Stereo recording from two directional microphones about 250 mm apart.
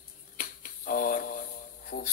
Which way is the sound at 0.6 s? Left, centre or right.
Left.